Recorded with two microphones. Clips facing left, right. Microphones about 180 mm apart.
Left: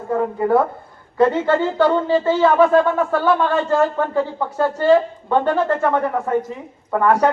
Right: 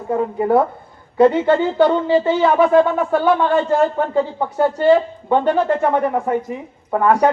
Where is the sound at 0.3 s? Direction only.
15° right (ahead or behind).